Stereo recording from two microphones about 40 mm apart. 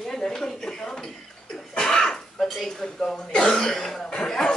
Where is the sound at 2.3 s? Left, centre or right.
Centre.